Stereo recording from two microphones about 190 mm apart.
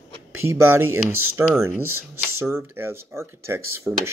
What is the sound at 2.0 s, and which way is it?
Speech, 15° right (ahead or behind).